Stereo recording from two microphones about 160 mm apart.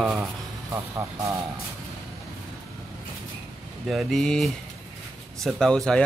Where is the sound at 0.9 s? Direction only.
20° right (ahead or behind).